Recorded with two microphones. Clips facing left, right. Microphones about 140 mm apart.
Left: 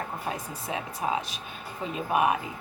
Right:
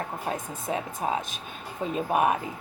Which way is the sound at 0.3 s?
40° right (ahead or behind).